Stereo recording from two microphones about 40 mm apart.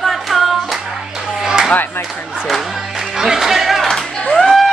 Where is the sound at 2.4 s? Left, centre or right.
Centre.